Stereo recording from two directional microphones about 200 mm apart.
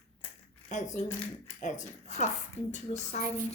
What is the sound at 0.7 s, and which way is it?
Speech, 35° left (ahead or behind).